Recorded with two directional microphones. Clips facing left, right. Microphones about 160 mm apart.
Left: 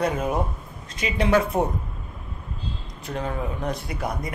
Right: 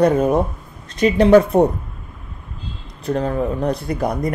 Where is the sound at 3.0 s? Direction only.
35° right (ahead or behind).